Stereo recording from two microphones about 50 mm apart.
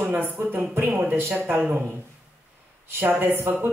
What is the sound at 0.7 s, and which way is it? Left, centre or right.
Speech, right.